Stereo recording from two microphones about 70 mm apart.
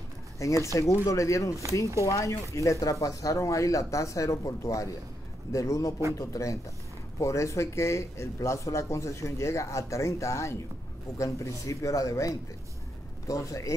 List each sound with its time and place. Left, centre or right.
0.4 s speech: left